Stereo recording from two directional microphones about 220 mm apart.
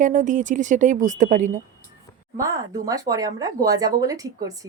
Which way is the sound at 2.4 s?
15° right (ahead or behind).